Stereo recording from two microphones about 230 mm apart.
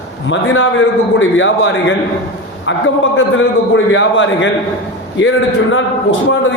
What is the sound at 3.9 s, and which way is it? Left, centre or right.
A man's voice, left.